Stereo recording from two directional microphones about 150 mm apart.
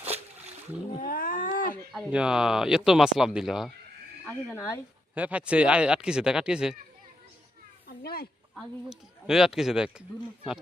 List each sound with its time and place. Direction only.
0.0 s a sound: 45° right (ahead or behind)
1.0 s a sound: 70° left (ahead or behind)
1.9 s speech: 5° right (ahead or behind)
4.5 s speech: 20° left (ahead or behind)
5.1 s speech: 10° right (ahead or behind)
7.9 s a child's voice: 90° left
8.5 s speech: 5° right (ahead or behind)